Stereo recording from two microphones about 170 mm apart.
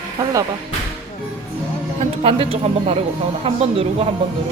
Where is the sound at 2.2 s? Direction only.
35° right (ahead or behind).